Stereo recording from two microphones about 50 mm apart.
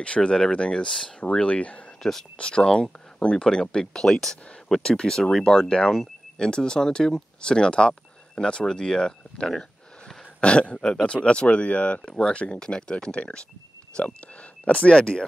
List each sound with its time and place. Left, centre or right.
0.0 s speech: left